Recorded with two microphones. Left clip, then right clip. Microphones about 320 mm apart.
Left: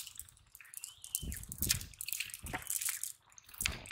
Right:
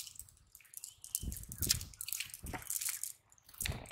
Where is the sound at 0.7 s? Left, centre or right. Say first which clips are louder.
Left 1 dB; centre.